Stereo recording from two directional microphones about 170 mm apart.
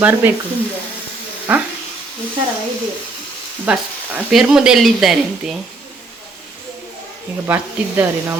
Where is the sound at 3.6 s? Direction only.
5° right (ahead or behind).